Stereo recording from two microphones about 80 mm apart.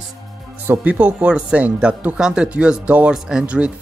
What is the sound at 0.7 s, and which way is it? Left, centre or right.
Speech, centre.